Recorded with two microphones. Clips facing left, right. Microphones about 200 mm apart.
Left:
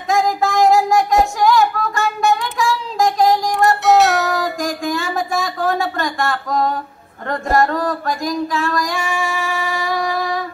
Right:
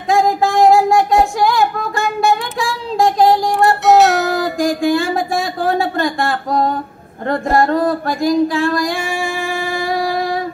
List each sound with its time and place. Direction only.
0.1 s child singing: 30° right (ahead or behind)
3.8 s music: centre (ahead or behind)
4.8 s a sound: 30° right (ahead or behind)